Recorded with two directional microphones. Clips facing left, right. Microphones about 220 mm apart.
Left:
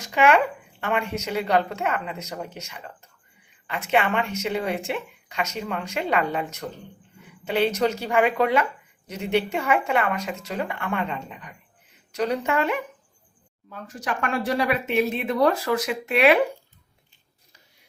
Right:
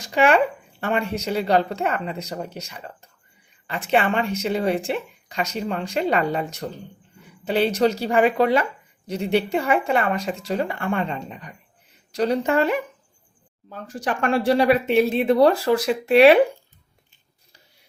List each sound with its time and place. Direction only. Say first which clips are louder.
0.0 s speech: right 2 dB; 35° right (ahead or behind)